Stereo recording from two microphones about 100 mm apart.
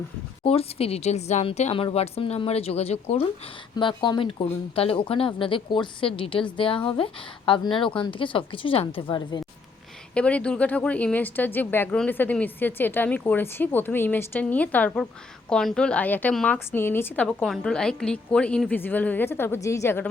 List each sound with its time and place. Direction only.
0.4 s speech: 75° left (ahead or behind)
3.8 s speech: 50° left (ahead or behind)
10.2 s speech: 10° left (ahead or behind)
16.7 s speech: 20° left (ahead or behind)
17.2 s speech: 5° left (ahead or behind); by 20.1 s 25° left (ahead or behind)